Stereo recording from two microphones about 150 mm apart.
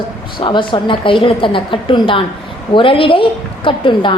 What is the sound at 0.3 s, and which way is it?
A woman's voice, 30° left (ahead or behind).